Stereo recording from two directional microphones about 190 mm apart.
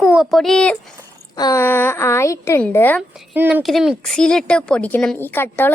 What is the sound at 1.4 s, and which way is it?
A woman's voice, 15° left (ahead or behind).